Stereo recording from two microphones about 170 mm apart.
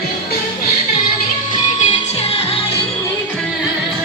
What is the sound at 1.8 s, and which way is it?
Music, 35° left (ahead or behind).